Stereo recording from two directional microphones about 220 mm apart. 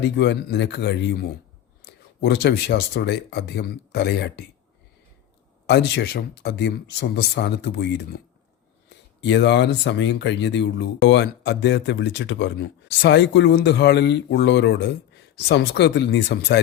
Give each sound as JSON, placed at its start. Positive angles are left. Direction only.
{"t": 0.2, "sound": "speech", "side_deg": 50}
{"t": 5.6, "sound": "speech", "side_deg": 50}
{"t": 9.2, "sound": "speech", "side_deg": 50}